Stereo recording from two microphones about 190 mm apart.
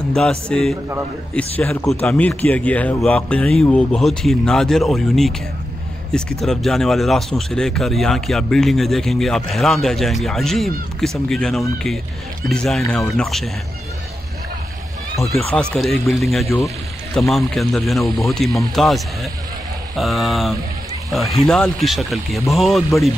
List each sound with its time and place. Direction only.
0.1 s speech: 5° left (ahead or behind)
15.2 s speech: centre (ahead or behind)
16.4 s speech: 15° left (ahead or behind)
17.3 s speech: centre (ahead or behind)